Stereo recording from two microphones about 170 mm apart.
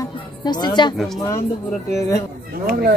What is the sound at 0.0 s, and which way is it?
Music, 25° left (ahead or behind).